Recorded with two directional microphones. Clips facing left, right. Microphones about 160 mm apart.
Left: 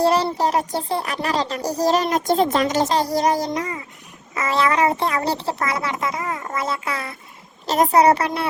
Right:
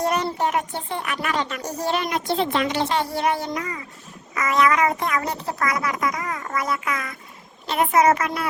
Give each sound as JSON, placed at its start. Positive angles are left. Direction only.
{"t": 0.0, "sound": "speech", "side_deg": 30}